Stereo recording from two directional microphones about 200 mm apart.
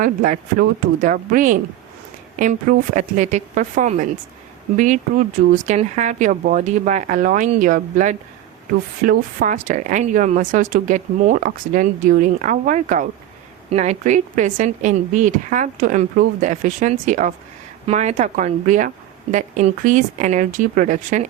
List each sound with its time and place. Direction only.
0.0 s a woman's voice: 40° right (ahead or behind)